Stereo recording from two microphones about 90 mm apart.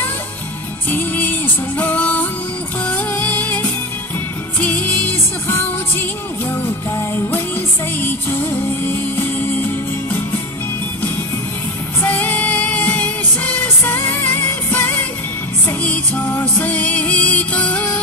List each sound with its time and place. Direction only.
0.8 s music: 20° left (ahead or behind)
12.0 s music: 20° left (ahead or behind)